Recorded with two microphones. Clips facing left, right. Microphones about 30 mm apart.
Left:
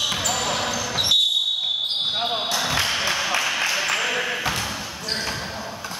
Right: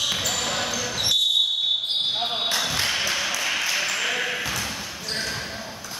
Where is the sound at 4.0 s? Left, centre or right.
Centre.